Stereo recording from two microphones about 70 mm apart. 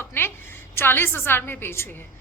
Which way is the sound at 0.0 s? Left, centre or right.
Left.